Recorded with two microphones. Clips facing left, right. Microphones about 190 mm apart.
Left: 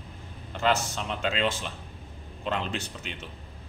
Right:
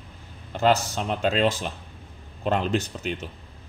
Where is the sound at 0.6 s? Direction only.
40° right (ahead or behind).